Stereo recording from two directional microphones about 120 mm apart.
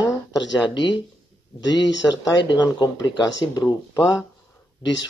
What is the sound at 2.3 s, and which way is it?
Speech, 40° left (ahead or behind).